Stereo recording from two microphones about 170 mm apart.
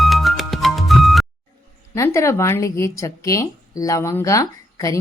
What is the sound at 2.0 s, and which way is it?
A woman's voice, 15° left (ahead or behind).